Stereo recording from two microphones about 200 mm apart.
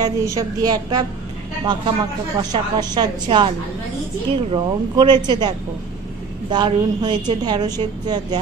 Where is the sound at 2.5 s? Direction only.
20° right (ahead or behind).